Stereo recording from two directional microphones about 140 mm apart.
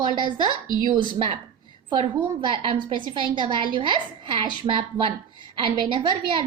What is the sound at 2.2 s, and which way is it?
A woman's voice, 35° right (ahead or behind).